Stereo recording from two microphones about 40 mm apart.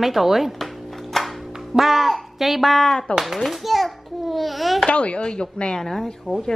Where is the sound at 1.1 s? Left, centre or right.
Centre.